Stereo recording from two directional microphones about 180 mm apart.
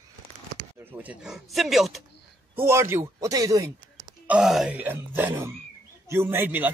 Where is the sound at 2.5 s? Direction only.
15° right (ahead or behind).